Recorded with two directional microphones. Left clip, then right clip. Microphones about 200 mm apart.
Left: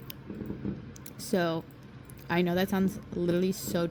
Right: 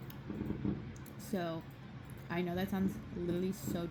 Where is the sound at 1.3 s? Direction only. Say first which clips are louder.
Left 10 dB; 45° left (ahead or behind).